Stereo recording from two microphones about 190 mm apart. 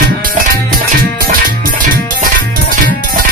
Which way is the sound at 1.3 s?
50° right (ahead or behind).